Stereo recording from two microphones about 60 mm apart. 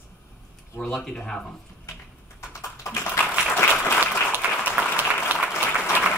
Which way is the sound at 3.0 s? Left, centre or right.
Left.